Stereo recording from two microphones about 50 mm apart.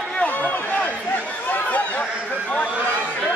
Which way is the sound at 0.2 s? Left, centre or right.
Left.